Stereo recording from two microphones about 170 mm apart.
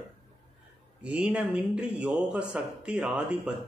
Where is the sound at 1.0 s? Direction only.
5° right (ahead or behind).